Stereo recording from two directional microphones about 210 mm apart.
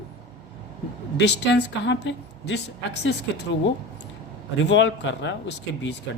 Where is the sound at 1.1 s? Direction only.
55° left (ahead or behind).